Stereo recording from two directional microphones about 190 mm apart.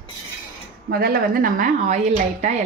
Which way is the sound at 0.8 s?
55° right (ahead or behind).